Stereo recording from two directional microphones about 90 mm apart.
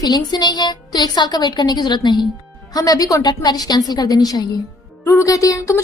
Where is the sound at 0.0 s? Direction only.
45° left (ahead or behind).